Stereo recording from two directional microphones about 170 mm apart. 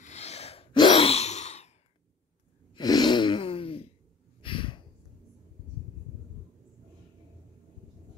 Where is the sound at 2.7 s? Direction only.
25° left (ahead or behind).